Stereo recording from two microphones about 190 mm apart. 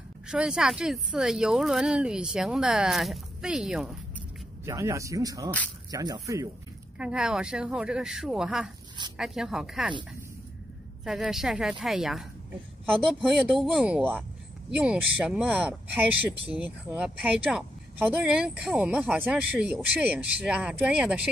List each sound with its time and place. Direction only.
0.3 s speech: 5° right (ahead or behind)
4.6 s speech: 15° right (ahead or behind)
7.0 s speech: 5° right (ahead or behind)
11.1 s speech: centre (ahead or behind)